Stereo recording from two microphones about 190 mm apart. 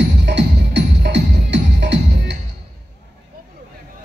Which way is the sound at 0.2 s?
70° right (ahead or behind).